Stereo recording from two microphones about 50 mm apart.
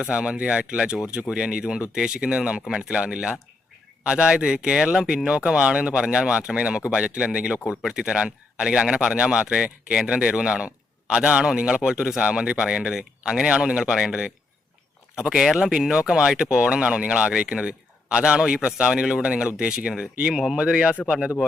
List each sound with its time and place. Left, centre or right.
0.1 s speech: centre